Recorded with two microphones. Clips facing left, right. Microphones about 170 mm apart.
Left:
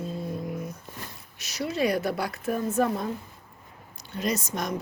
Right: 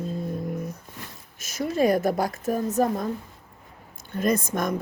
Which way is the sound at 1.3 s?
50° right (ahead or behind).